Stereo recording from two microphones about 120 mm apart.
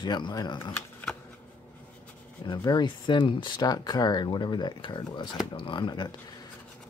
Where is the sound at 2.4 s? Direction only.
40° left (ahead or behind).